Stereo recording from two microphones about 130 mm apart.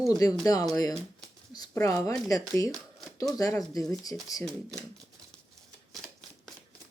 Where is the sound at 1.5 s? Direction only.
30° left (ahead or behind).